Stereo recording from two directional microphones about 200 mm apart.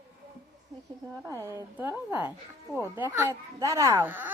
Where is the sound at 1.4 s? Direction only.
15° right (ahead or behind).